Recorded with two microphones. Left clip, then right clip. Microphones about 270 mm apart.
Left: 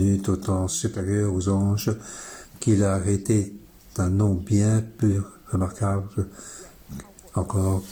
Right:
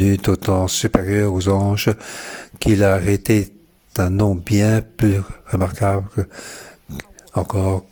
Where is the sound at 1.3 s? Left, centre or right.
Right.